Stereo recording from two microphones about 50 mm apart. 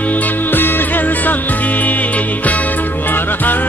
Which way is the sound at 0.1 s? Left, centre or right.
Left.